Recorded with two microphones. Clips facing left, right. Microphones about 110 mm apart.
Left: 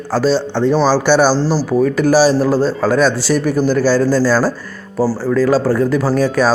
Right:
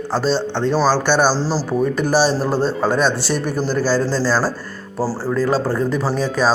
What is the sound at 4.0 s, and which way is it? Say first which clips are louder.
Speech: left 5 dB; 25° right (ahead or behind).